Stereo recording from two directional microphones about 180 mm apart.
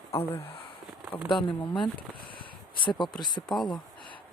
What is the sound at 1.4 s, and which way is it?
Speech, 25° left (ahead or behind).